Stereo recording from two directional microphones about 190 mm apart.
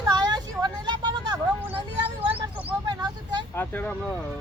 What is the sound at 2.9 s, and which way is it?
Speech, 20° right (ahead or behind).